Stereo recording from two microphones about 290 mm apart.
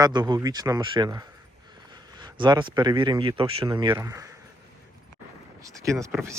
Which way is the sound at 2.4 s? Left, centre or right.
Centre.